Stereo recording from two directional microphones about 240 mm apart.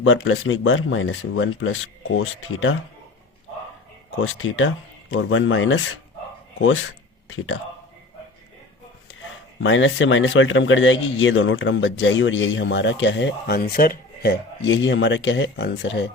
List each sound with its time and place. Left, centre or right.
0.0 s speech: left
4.2 s speech: left
9.2 s speech: left